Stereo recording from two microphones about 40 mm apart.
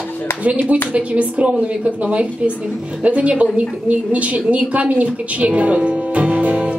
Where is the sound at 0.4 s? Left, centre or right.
Right.